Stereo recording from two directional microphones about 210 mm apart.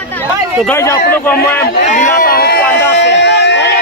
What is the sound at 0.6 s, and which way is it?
Speech, 15° left (ahead or behind).